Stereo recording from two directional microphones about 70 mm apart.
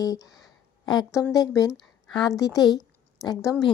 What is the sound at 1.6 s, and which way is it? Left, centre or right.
Speech, left.